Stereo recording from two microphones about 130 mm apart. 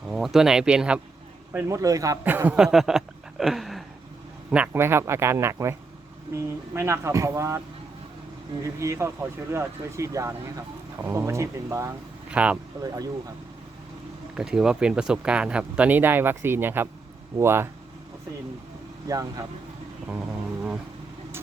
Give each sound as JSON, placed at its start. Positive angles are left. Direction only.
{"t": 0.1, "sound": "speech", "side_deg": -5}
{"t": 1.5, "sound": "speech", "side_deg": -20}
{"t": 2.2, "sound": "a sound", "side_deg": -15}
{"t": 4.5, "sound": "speech", "side_deg": -15}
{"t": 8.6, "sound": "speech", "side_deg": -25}
{"t": 12.3, "sound": "speech", "side_deg": -10}
{"t": 12.7, "sound": "speech", "side_deg": -25}
{"t": 14.3, "sound": "speech", "side_deg": -5}
{"t": 19.0, "sound": "speech", "side_deg": -25}